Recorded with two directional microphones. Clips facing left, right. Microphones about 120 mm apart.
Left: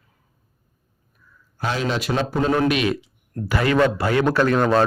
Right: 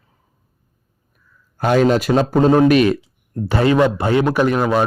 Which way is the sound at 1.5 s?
50° right (ahead or behind).